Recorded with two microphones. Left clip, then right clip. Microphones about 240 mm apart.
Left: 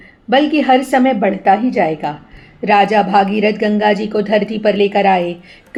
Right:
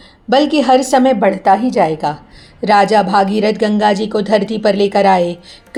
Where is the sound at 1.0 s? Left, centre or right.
Centre.